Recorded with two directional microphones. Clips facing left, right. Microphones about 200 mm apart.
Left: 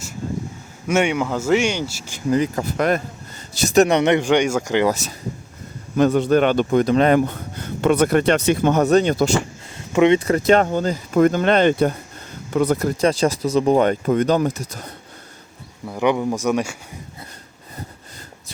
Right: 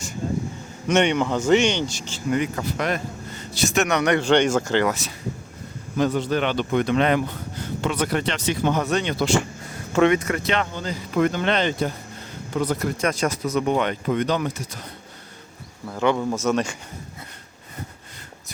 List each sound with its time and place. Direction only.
0.9 s a man's voice: 10° left (ahead or behind)
2.3 s speech: 35° left (ahead or behind)
2.6 s a man's voice: 50° left (ahead or behind); by 4.3 s 25° left (ahead or behind)
4.3 s a man's voice: 10° left (ahead or behind)
6.0 s speech: 55° left (ahead or behind)
9.9 s speech: 15° left (ahead or behind)
10.2 s speech: 35° left (ahead or behind); by 12.9 s 55° left (ahead or behind)
13.0 s speech: 30° left (ahead or behind)
15.9 s a man's voice: 15° left (ahead or behind)